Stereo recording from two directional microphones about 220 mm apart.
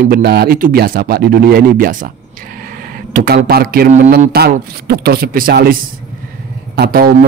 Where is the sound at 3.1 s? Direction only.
40° right (ahead or behind).